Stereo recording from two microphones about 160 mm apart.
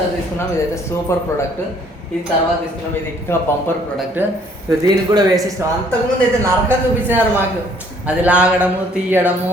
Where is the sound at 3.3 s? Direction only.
15° left (ahead or behind).